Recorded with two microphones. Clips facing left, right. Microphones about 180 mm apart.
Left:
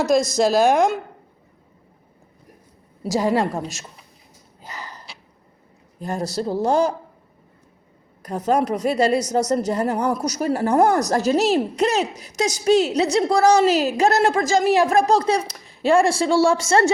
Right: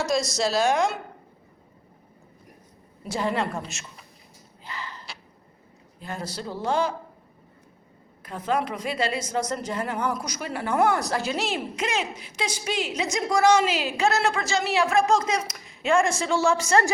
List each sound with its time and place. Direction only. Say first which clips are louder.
0.0 s speech: left 7 dB; 55° left (ahead or behind)
3.2 s a woman's voice: left 6 dB; 40° left (ahead or behind)
4.6 s a sound: left 1 dB; 40° left (ahead or behind)
6.0 s a woman's voice: left 9 dB; 40° left (ahead or behind)
8.2 s a woman's voice: left 6 dB; 40° left (ahead or behind)